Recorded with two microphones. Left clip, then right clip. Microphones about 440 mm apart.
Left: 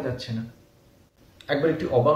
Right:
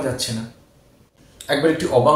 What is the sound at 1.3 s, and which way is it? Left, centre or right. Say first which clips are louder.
Speech: right 5 dB; left.